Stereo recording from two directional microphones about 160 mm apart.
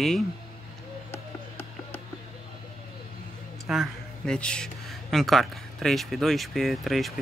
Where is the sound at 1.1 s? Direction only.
15° left (ahead or behind).